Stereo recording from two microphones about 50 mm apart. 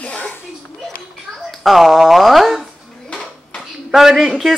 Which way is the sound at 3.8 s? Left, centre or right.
Centre.